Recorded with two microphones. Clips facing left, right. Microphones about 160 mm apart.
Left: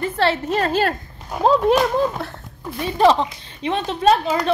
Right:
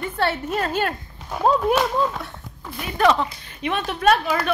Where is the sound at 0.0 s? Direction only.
90° left; by 0.9 s 75° left (ahead or behind).